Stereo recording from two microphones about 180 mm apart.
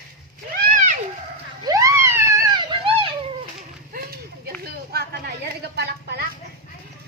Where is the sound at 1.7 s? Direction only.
15° right (ahead or behind).